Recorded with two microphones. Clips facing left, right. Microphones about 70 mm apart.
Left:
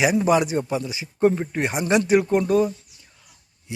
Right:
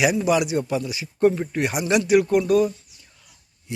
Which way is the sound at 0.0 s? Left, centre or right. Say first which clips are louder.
Left 1 dB; left.